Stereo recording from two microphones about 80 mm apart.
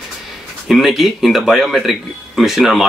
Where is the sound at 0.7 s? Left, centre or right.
Centre.